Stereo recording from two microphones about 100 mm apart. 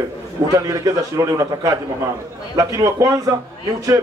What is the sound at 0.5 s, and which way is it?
A man's voice, 35° right (ahead or behind).